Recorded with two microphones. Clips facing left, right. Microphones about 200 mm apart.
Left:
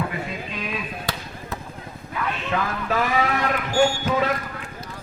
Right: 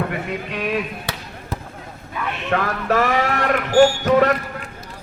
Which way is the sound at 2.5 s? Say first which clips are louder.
Right 6 dB; 70° right (ahead or behind).